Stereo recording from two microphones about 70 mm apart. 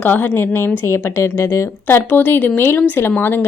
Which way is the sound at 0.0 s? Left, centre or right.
Left.